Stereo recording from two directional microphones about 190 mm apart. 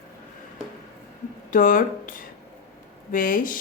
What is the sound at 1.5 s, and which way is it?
Speech, 45° left (ahead or behind).